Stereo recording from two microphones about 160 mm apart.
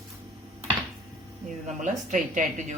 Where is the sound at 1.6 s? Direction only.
50° right (ahead or behind).